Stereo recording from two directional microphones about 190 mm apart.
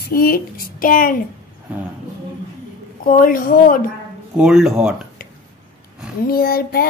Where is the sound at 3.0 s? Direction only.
45° left (ahead or behind).